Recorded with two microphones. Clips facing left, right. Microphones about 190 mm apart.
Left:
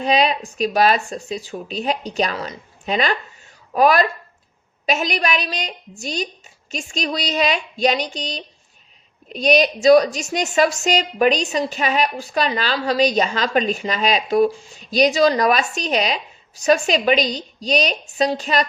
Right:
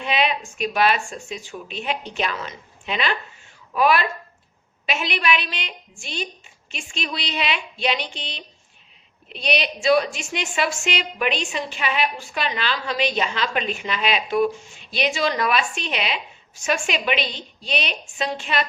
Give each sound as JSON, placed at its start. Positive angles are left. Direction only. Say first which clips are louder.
{"t": 0.0, "sound": "a woman's voice", "louder": "left 5 dB", "side_deg": 40}